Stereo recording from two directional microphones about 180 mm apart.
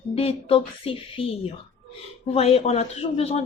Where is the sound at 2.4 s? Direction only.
35° left (ahead or behind).